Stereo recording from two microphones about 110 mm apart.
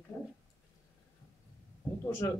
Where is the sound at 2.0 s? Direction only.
25° left (ahead or behind).